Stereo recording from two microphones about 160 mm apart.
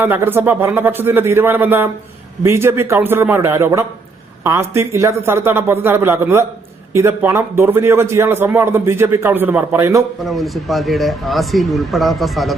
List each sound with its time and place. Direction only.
0.0 s a man's voice: 10° right (ahead or behind)
10.2 s speech: centre (ahead or behind)